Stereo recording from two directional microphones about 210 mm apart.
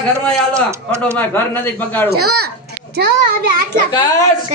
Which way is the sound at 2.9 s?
45° right (ahead or behind).